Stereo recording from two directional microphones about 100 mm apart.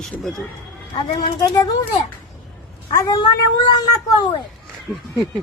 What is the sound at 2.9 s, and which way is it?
Speech, 35° left (ahead or behind).